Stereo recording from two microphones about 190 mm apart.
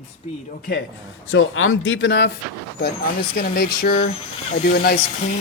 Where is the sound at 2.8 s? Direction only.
55° left (ahead or behind).